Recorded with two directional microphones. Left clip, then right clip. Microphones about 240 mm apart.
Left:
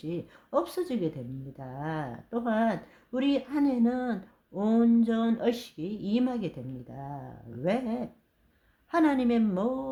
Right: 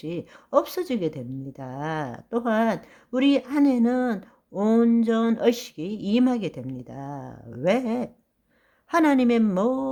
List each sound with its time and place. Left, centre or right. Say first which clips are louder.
0.0 s a woman's voice: right 4 dB; right